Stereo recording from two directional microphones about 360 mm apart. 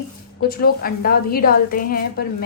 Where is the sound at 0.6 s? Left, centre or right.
Left.